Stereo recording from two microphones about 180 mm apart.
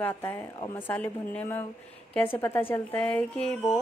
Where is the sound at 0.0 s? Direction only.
10° left (ahead or behind).